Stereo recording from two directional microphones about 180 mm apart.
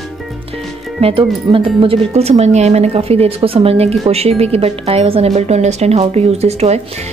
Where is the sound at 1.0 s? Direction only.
30° right (ahead or behind).